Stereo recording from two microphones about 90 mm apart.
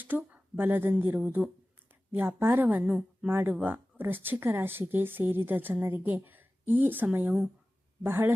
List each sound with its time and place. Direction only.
0.0 s a woman's voice: 20° right (ahead or behind)
2.8 s speech: 10° right (ahead or behind)
3.2 s speech: 25° right (ahead or behind)